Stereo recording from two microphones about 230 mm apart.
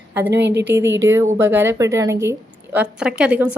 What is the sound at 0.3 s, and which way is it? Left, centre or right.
Speech, right.